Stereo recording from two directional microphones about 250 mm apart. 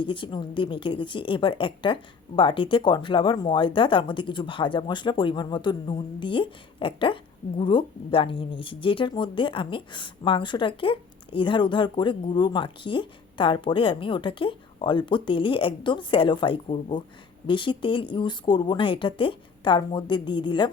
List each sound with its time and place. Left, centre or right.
0.0 s speech: centre